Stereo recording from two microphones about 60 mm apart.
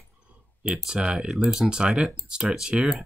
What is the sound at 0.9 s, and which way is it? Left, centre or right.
Speech, centre.